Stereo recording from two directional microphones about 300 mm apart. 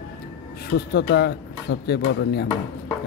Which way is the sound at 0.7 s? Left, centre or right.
Left.